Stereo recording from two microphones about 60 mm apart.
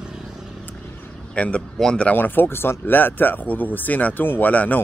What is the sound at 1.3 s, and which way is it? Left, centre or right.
Speech, left.